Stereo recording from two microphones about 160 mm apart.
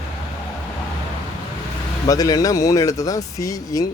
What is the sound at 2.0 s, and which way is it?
Speech, 20° left (ahead or behind).